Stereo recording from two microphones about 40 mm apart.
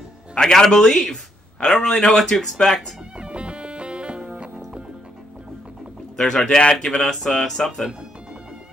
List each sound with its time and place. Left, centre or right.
0.4 s a man's voice: centre
3.2 s music: right
6.1 s a man's voice: centre